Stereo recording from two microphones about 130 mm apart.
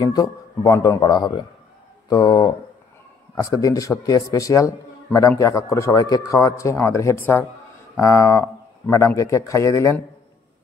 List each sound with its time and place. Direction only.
0.0 s speech: 30° left (ahead or behind)